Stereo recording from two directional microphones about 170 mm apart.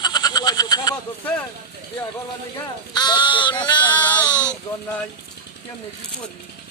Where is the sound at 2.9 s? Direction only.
25° left (ahead or behind).